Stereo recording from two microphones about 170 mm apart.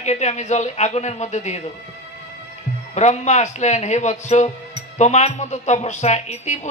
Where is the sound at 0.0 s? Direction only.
40° left (ahead or behind).